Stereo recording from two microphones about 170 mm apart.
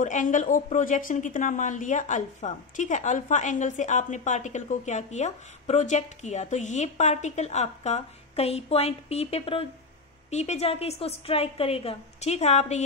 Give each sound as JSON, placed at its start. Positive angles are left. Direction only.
{"t": 0.0, "sound": "a woman's voice", "side_deg": 50}